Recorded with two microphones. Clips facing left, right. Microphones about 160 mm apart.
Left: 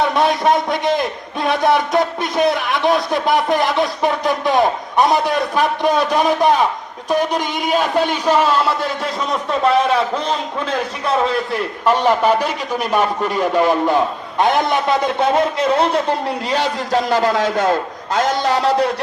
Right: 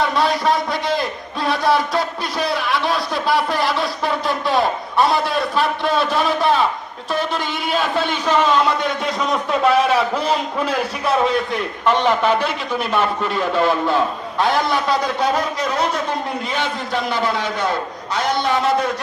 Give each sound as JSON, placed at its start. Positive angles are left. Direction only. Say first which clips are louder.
{"t": 0.0, "sound": "a man's voice", "louder": "left 2 dB", "side_deg": 20}
{"t": 11.9, "sound": "a man's voice", "louder": "left 2 dB", "side_deg": 10}